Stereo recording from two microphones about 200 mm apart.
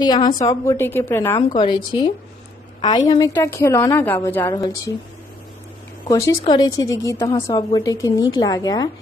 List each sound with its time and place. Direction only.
0.0 s a woman's voice: 20° left (ahead or behind)
1.6 s a woman's voice: 25° left (ahead or behind)
3.1 s a woman's voice: 15° left (ahead or behind)
6.0 s a woman's voice: 15° left (ahead or behind)